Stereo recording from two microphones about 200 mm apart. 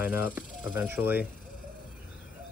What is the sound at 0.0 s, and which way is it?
Speech, 5° right (ahead or behind).